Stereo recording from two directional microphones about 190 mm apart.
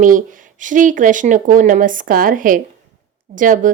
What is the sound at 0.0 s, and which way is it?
A woman's voice, 45° right (ahead or behind).